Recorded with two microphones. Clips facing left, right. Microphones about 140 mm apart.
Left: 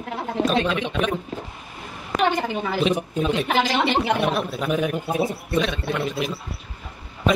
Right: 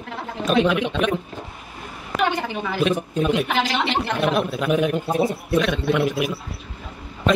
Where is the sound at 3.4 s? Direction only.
5° left (ahead or behind).